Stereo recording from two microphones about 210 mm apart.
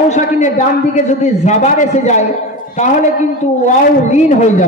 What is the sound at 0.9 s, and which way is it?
A man's voice, 35° left (ahead or behind).